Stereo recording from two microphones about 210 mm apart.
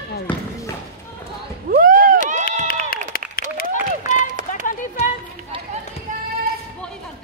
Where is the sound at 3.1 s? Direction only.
45° left (ahead or behind).